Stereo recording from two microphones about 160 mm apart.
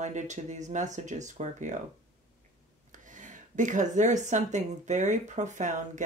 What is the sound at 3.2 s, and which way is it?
Speech, 50° right (ahead or behind).